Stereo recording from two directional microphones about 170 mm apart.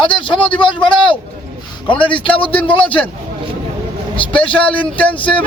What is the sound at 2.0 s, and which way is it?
Speech, 30° left (ahead or behind).